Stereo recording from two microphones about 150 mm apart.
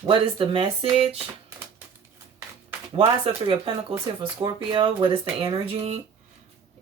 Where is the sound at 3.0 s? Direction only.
35° right (ahead or behind).